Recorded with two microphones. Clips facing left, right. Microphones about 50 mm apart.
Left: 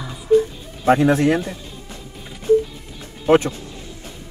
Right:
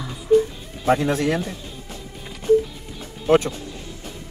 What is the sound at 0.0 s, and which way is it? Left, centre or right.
Music, centre.